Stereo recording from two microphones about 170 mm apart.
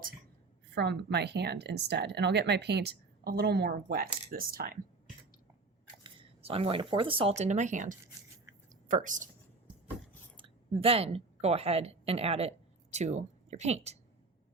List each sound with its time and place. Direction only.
0.7 s speech: 85° right; by 4.8 s 55° right (ahead or behind)
6.0 s speech: 35° right (ahead or behind); by 9.3 s 50° right (ahead or behind)
10.3 s a woman's voice: 30° right (ahead or behind)